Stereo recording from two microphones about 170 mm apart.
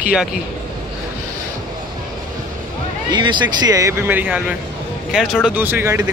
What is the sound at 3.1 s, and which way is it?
Speech, 25° right (ahead or behind).